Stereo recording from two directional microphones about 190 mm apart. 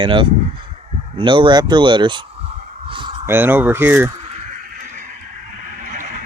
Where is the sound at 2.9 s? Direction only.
25° right (ahead or behind).